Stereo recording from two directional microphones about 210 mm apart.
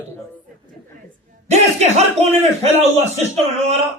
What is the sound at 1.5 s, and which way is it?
A man's voice, 30° right (ahead or behind).